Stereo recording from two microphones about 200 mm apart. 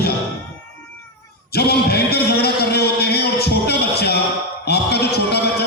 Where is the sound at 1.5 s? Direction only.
50° left (ahead or behind).